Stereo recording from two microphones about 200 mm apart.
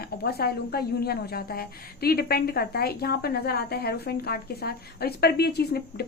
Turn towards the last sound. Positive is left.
turn(degrees=50)  # may be behind; listen again after turning